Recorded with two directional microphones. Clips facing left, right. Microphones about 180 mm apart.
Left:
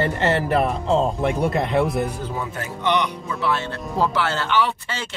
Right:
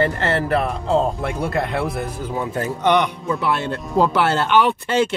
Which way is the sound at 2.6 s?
50° right (ahead or behind).